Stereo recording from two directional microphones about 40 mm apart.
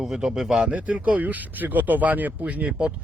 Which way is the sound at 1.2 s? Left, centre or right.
Right.